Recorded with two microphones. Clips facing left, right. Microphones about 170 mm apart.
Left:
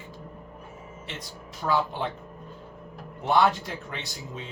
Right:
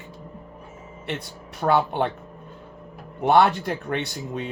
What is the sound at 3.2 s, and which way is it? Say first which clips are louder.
A man's voice: right 5 dB; 60° right (ahead or behind).